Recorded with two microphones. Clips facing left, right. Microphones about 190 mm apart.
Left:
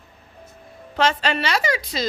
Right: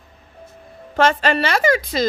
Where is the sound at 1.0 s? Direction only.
50° right (ahead or behind).